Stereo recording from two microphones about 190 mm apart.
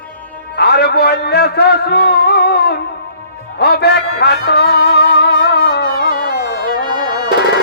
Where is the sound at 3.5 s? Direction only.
60° left (ahead or behind).